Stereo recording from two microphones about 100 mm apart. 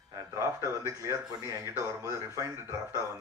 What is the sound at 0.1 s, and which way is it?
Speech, 35° right (ahead or behind).